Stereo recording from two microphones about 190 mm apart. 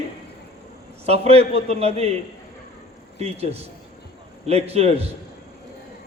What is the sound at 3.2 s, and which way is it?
A man's voice, 35° right (ahead or behind).